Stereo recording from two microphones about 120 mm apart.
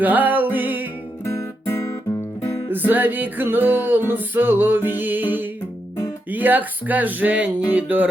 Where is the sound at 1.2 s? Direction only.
25° left (ahead or behind).